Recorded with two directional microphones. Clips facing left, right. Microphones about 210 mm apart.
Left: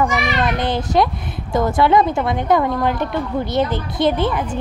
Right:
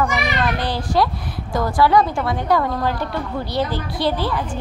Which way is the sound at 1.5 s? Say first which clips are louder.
Left 2 dB; 20° left (ahead or behind).